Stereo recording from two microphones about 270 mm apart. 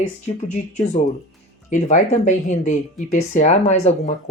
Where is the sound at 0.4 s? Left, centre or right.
Left.